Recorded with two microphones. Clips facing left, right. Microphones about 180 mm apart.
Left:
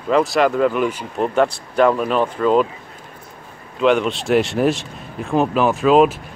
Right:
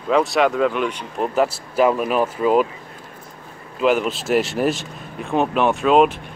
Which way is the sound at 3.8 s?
5° right (ahead or behind).